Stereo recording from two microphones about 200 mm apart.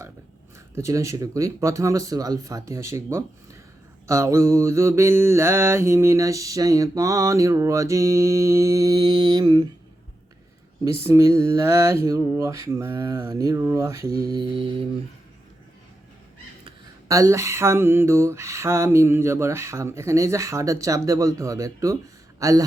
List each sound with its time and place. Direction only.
0.8 s mantra: 15° right (ahead or behind)
11.0 s mantra: 15° right (ahead or behind)
16.6 s mantra: 15° right (ahead or behind)
22.4 s speech: 15° right (ahead or behind)